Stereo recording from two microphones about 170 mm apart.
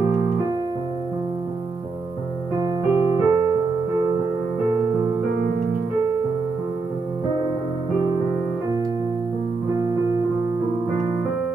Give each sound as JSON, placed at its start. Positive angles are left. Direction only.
{"t": 2.6, "sound": "piano", "side_deg": -20}